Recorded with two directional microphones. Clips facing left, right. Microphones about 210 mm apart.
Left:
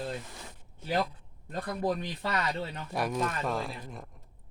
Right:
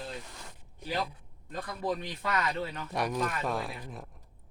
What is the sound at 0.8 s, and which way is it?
Speech, 15° right (ahead or behind).